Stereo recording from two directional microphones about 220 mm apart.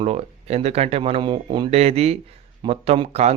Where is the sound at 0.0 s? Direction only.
30° right (ahead or behind).